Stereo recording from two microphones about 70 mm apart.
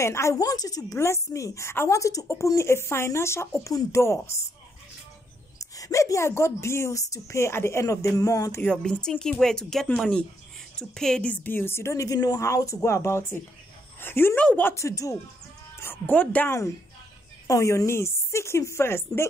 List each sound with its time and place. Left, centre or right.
0.0 s a woman's voice: left
0.4 s a man's voice: left
0.9 s a woman's voice: left
5.6 s speech: left
7.8 s a man's voice: left
9.2 s speech: centre
11.2 s a woman's voice: left
14.4 s speech: centre
14.7 s speech: left
16.1 s speech: centre
16.4 s a woman's voice: left